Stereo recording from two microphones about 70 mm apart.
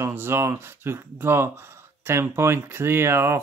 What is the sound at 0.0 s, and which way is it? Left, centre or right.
Speech, right.